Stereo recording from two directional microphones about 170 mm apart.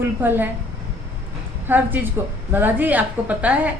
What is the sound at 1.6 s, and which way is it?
A woman's voice, 10° right (ahead or behind).